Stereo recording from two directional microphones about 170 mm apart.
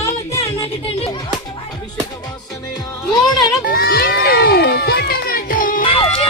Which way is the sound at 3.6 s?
60° left (ahead or behind).